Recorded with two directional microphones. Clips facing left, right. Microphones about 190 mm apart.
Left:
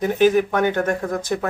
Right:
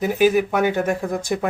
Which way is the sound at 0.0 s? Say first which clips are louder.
Left 1 dB; 10° right (ahead or behind).